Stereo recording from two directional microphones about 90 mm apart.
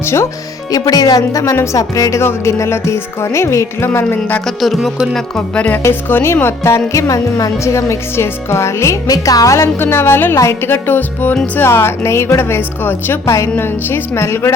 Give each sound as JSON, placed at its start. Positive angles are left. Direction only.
{"t": 0.0, "sound": "speech", "side_deg": 30}
{"t": 0.7, "sound": "speech", "side_deg": 45}
{"t": 4.4, "sound": "music", "side_deg": 0}
{"t": 5.5, "sound": "speech", "side_deg": 15}
{"t": 9.7, "sound": "a woman's voice", "side_deg": 25}